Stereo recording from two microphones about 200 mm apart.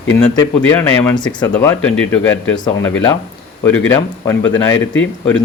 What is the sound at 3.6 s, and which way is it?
Speech, 10° left (ahead or behind).